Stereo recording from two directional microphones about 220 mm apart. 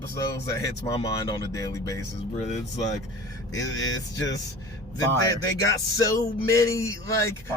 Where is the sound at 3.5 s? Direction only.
15° left (ahead or behind).